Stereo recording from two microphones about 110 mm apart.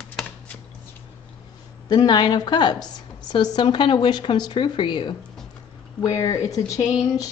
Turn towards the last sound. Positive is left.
turn(degrees=30)  # may be behind; listen again after turning